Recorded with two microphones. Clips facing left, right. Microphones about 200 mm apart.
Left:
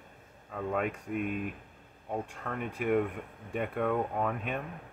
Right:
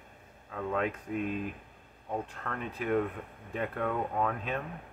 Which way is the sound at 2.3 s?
10° left (ahead or behind).